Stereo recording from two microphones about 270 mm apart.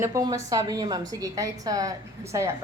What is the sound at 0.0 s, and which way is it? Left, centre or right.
A woman's voice, centre.